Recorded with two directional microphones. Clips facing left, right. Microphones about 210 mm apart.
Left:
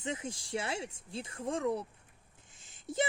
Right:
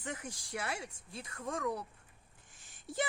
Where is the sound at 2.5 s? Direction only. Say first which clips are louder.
Left 4 dB; 20° left (ahead or behind).